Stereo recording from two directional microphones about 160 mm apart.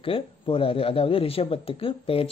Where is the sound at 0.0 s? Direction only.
35° left (ahead or behind).